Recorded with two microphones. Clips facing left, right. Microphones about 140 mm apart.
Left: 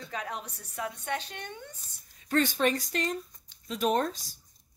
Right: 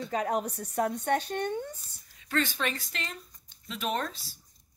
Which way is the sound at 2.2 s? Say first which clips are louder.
Left 4 dB; 40° left (ahead or behind).